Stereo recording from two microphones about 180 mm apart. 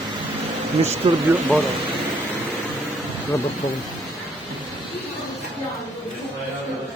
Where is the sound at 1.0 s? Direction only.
30° right (ahead or behind).